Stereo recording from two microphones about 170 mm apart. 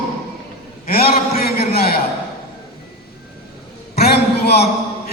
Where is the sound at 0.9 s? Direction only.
65° left (ahead or behind).